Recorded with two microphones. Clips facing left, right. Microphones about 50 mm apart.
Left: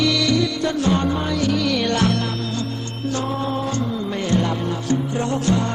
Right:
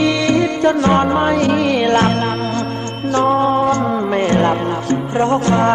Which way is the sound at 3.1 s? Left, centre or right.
Right.